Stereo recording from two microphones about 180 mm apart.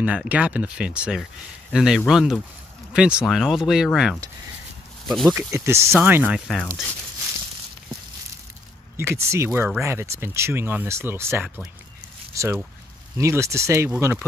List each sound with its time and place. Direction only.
0.0 s speech: 5° right (ahead or behind)
5.3 s speech: 15° right (ahead or behind); by 6.7 s centre (ahead or behind)
8.9 s speech: 15° right (ahead or behind)